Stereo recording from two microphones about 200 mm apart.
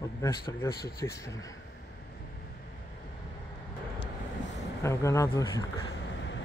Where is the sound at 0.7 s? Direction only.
50° left (ahead or behind).